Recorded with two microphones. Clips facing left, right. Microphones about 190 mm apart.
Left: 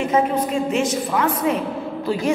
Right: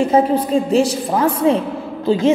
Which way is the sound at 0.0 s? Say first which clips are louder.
Right 5 dB; 30° right (ahead or behind).